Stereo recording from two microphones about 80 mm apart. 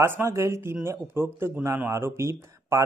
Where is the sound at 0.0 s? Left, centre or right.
Right.